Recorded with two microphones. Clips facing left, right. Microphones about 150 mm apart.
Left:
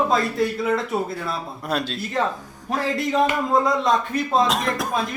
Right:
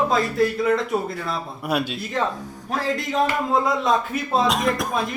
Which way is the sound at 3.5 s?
5° right (ahead or behind).